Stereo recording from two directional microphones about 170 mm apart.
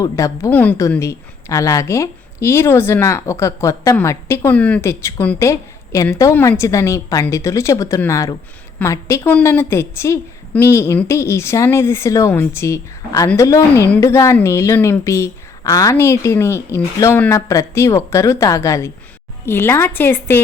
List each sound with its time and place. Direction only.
0.0 s a woman's voice: 20° left (ahead or behind)